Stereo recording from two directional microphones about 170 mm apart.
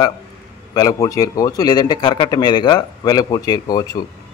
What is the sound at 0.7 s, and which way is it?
A man's voice, 20° left (ahead or behind).